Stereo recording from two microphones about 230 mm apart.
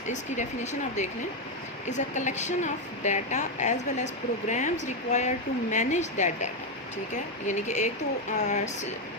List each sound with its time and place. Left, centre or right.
0.1 s a woman's voice: left